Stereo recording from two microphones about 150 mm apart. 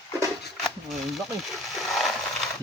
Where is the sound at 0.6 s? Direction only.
Centre (ahead or behind).